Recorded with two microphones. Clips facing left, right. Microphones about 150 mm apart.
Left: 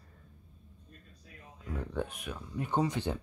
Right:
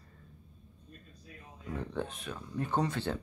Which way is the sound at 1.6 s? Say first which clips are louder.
Even; 5° left (ahead or behind).